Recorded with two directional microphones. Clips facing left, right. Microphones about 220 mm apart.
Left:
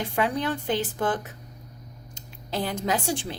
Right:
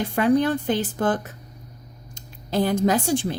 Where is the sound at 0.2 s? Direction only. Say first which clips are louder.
Right 8 dB; 45° right (ahead or behind).